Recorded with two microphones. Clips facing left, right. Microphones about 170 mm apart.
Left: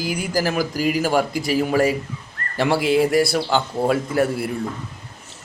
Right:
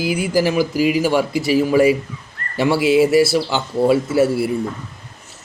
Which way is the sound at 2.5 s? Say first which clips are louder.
Right 3 dB; 5° right (ahead or behind).